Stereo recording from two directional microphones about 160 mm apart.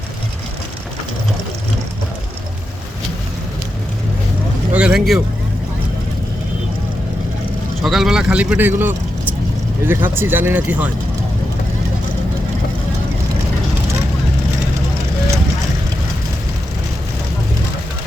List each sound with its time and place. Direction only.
4.7 s vehicle: 5° right (ahead or behind)
7.8 s speech: centre (ahead or behind)